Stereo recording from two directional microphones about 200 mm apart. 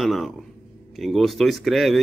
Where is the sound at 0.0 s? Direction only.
Centre (ahead or behind).